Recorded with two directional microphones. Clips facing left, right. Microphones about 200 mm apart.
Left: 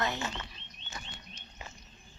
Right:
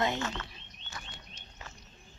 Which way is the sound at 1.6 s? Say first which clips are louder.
Left 1 dB; 15° left (ahead or behind).